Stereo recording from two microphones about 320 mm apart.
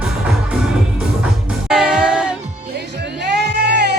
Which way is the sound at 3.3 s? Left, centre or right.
Right.